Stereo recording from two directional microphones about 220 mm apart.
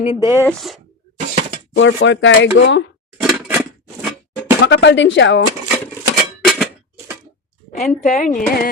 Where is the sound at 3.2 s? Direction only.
Centre (ahead or behind).